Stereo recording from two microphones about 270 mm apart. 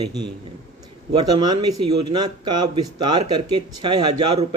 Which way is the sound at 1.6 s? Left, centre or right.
Right.